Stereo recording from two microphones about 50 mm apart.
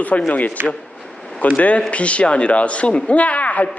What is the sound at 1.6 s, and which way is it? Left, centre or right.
Speech, left.